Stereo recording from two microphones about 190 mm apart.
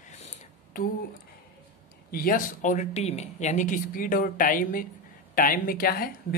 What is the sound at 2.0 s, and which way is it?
A woman's voice, 50° left (ahead or behind).